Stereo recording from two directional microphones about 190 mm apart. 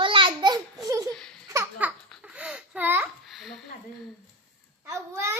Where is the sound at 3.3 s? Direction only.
Centre (ahead or behind).